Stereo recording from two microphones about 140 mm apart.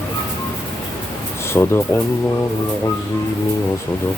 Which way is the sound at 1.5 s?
15° left (ahead or behind).